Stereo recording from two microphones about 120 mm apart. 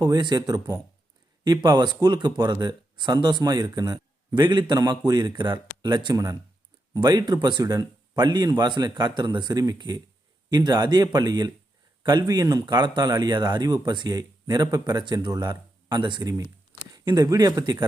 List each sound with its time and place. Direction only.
0.0 s speech: 35° right (ahead or behind)